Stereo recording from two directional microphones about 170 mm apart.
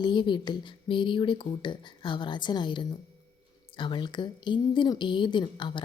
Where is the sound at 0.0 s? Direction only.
25° left (ahead or behind).